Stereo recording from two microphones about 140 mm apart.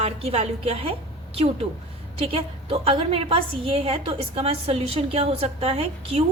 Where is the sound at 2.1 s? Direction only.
40° right (ahead or behind).